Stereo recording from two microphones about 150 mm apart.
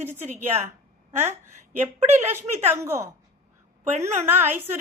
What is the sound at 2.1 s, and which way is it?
Speech, 15° right (ahead or behind).